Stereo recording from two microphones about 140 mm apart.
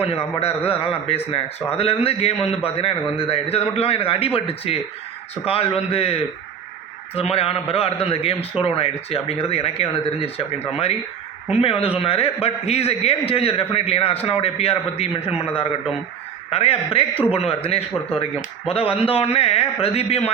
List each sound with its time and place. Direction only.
0.3 s a man's voice: 45° left (ahead or behind)
11.6 s a man's voice: 40° left (ahead or behind)